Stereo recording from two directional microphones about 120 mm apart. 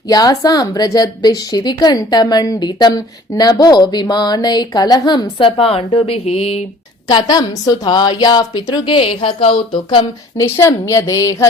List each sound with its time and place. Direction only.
0.1 s a woman's voice: 30° left (ahead or behind); by 6.6 s 55° left (ahead or behind)
7.1 s a woman's voice: 35° left (ahead or behind)
10.3 s a woman's voice: 25° left (ahead or behind)